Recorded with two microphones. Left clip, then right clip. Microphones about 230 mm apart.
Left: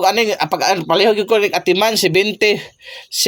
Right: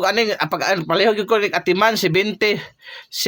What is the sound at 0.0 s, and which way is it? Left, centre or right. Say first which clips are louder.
Speech: left 3 dB; centre.